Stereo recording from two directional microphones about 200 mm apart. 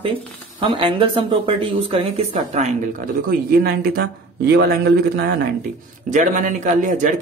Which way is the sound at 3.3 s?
50° right (ahead or behind).